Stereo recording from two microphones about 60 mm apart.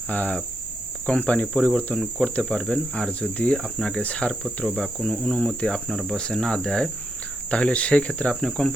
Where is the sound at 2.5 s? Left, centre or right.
Centre.